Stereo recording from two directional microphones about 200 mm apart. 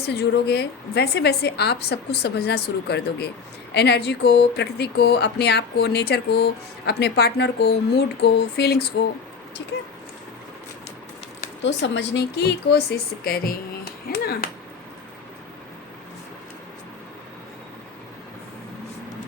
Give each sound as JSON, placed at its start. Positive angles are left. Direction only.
{"t": 0.0, "sound": "speech", "side_deg": 55}
{"t": 11.6, "sound": "speech", "side_deg": 60}